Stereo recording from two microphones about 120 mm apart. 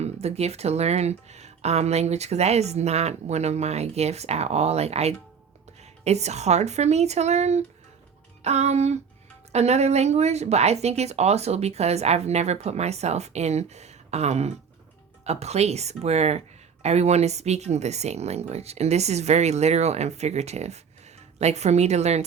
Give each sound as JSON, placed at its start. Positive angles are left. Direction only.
{"t": 0.0, "sound": "speech", "side_deg": -60}